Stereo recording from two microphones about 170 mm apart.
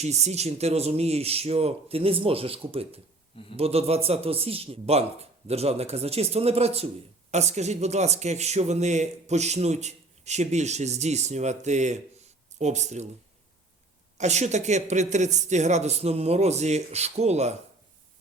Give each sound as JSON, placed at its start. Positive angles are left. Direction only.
{"t": 0.0, "sound": "a man's voice", "side_deg": -40}
{"t": 14.2, "sound": "a man's voice", "side_deg": -40}